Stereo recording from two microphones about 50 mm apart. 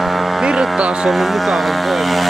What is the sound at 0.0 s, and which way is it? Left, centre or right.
Vehicle, centre.